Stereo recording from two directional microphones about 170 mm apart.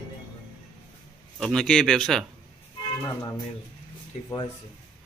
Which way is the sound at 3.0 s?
20° left (ahead or behind).